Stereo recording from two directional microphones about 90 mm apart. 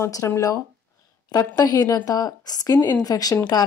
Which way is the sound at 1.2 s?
45° left (ahead or behind).